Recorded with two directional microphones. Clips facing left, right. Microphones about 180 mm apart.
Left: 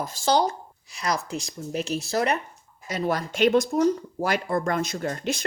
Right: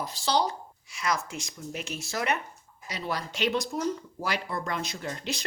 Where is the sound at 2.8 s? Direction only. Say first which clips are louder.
Left 7 dB; 50° left (ahead or behind).